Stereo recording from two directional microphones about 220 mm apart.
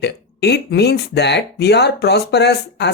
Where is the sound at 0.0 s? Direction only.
50° left (ahead or behind).